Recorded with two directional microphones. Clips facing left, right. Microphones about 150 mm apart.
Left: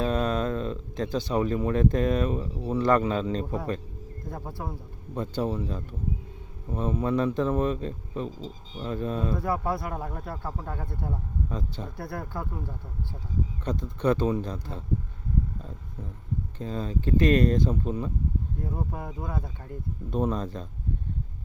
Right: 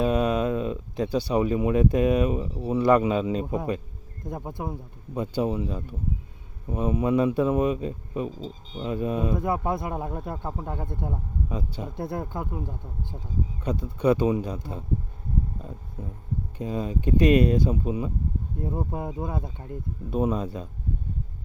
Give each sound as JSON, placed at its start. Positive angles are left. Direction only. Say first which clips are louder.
{"t": 0.0, "sound": "speech", "louder": "right 3 dB", "side_deg": -10}
{"t": 11.9, "sound": "speech", "louder": "right 4 dB", "side_deg": -20}
{"t": 16.6, "sound": "speech", "louder": "right 4 dB", "side_deg": -10}
{"t": 18.6, "sound": "speech", "louder": "right 7 dB", "side_deg": -25}
{"t": 20.1, "sound": "speech", "louder": "right 2 dB", "side_deg": -10}